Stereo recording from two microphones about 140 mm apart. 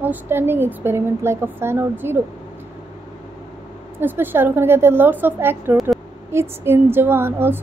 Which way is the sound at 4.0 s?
15° right (ahead or behind).